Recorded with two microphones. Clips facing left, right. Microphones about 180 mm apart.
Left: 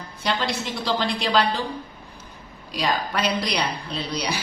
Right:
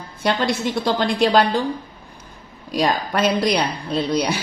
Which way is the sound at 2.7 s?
45° right (ahead or behind).